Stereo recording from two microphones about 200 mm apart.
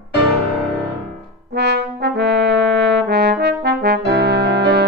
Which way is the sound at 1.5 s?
55° right (ahead or behind).